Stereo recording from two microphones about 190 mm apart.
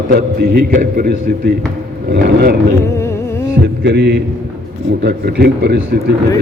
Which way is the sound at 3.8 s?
60° right (ahead or behind).